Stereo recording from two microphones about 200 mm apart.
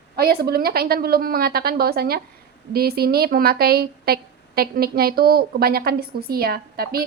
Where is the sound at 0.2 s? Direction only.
50° right (ahead or behind).